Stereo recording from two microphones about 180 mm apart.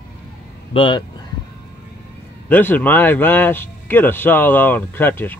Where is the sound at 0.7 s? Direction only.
30° left (ahead or behind).